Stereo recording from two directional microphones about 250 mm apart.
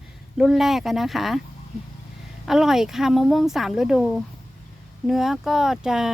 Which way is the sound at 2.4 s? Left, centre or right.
Centre.